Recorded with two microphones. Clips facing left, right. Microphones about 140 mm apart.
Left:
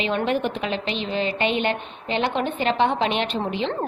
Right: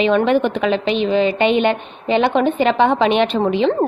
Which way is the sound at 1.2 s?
15° right (ahead or behind).